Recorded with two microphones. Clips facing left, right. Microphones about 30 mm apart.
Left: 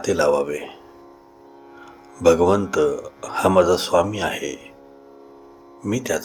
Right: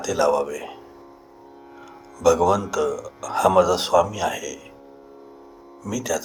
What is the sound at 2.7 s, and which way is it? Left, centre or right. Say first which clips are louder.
Speech: left 4 dB; centre.